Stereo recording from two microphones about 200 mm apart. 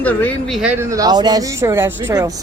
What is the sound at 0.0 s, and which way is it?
A woman's voice, 10° left (ahead or behind).